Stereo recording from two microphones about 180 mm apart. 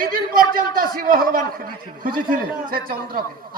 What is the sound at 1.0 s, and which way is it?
Speech, 55° right (ahead or behind).